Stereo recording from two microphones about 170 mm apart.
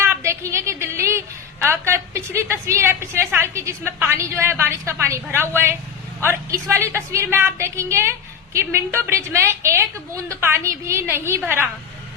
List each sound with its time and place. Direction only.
0.0 s a woman's voice: 15° right (ahead or behind)